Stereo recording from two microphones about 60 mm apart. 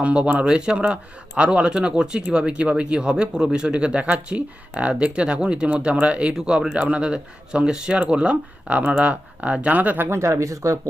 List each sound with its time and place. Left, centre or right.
0.0 s speech: centre
10.1 s speech: right